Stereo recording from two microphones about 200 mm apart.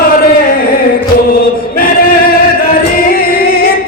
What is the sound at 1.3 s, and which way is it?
Choir, 50° left (ahead or behind).